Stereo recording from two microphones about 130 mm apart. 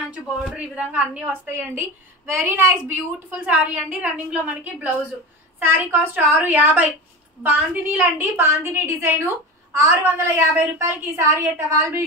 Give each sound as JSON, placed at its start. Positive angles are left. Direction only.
{"t": 0.1, "sound": "a woman's voice", "side_deg": -10}